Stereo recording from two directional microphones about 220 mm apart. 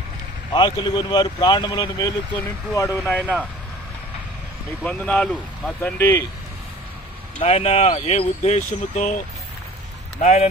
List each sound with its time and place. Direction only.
0.5 s speech: 20° left (ahead or behind)
4.8 s speech: 5° left (ahead or behind)
7.3 s speech: 30° left (ahead or behind)